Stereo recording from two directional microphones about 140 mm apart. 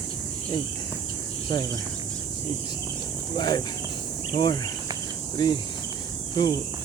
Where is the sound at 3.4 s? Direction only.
30° left (ahead or behind).